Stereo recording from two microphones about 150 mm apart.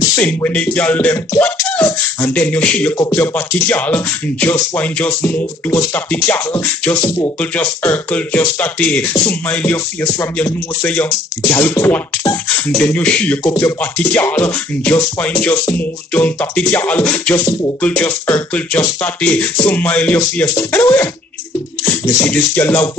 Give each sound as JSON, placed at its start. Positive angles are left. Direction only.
{"t": 0.2, "sound": "speech", "side_deg": 10}
{"t": 13.5, "sound": "speech", "side_deg": 20}
{"t": 22.2, "sound": "speech", "side_deg": 10}